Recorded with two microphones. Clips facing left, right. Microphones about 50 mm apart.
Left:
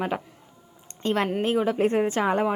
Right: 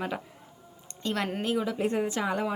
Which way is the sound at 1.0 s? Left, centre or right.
Left.